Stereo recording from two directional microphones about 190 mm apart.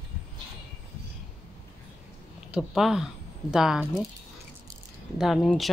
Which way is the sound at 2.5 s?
Centre (ahead or behind).